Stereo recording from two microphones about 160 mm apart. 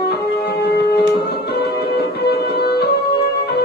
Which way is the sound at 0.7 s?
90° left.